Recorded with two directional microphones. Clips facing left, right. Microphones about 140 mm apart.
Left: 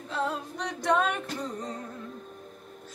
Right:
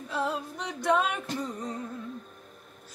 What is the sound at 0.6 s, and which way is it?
A capella, 5° right (ahead or behind).